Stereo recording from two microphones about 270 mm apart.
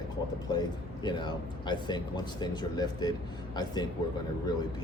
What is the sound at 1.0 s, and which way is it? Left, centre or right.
Speech, centre.